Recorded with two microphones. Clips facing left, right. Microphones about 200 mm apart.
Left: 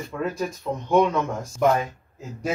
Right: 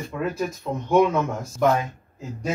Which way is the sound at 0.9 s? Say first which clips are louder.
Right 1 dB; 5° right (ahead or behind).